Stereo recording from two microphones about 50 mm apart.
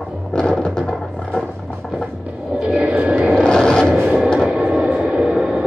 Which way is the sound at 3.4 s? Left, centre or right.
Centre.